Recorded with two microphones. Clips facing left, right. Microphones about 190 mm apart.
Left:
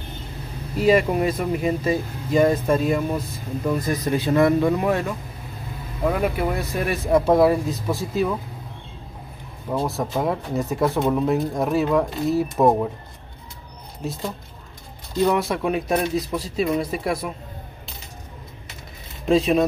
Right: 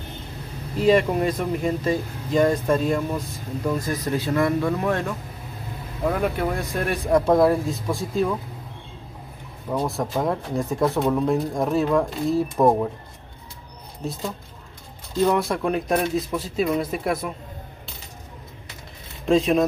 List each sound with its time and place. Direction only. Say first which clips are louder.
0.7 s speech: even; 5° left (ahead or behind)
9.7 s speech: left 1 dB; centre (ahead or behind)
15.2 s speech: even; centre (ahead or behind)
19.2 s speech: left 1 dB; centre (ahead or behind)